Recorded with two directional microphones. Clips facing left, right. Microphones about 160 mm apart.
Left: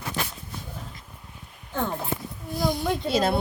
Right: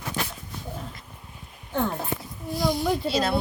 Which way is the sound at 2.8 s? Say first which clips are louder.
Right 2 dB; centre (ahead or behind).